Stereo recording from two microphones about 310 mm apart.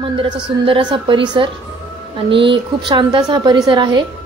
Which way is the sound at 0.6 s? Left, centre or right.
Centre.